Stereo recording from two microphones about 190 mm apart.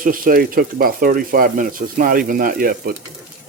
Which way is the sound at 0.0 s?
50° right (ahead or behind).